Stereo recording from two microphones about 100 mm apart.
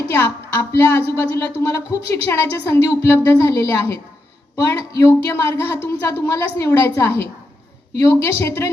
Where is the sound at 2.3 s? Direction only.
25° left (ahead or behind).